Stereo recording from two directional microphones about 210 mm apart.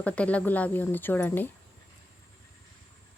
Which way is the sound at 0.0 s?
5° left (ahead or behind).